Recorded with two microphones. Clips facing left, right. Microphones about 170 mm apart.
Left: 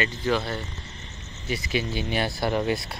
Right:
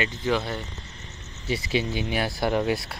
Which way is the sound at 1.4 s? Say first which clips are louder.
Right 2 dB; 30° right (ahead or behind).